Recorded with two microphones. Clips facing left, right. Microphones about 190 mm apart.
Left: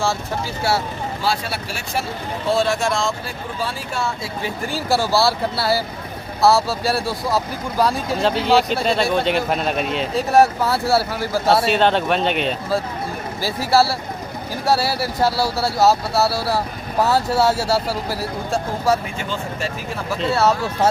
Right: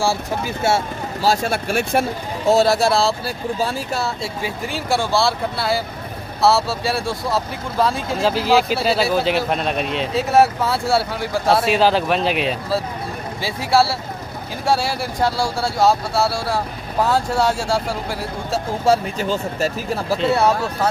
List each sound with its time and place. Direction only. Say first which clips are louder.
0.0 s speech: right 2 dB; 15° right (ahead or behind)
1.2 s speech: right 6 dB; 45° right (ahead or behind)
2.5 s speech: right 4 dB; 40° right (ahead or behind)
4.4 s speech: left 2 dB; centre (ahead or behind)
18.9 s speech: right 3 dB; 25° right (ahead or behind)
19.2 s speech: right 5 dB; 40° right (ahead or behind)